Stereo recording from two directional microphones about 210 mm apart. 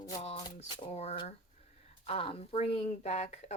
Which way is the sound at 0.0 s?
30° left (ahead or behind).